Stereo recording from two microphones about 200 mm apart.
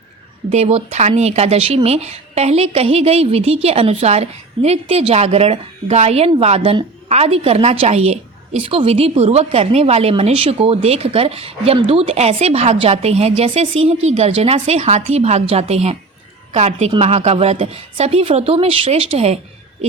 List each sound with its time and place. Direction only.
0.5 s speech: 35° right (ahead or behind)